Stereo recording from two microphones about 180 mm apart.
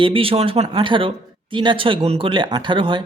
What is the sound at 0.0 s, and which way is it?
Speech, 30° right (ahead or behind).